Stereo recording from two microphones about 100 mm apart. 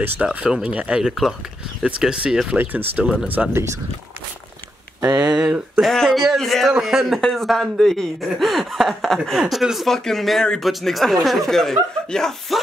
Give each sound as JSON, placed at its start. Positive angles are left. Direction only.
{"t": 0.2, "sound": "speech", "side_deg": -10}
{"t": 5.3, "sound": "speech", "side_deg": -10}